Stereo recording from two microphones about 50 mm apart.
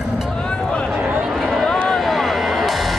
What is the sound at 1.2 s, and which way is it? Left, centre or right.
Run, centre.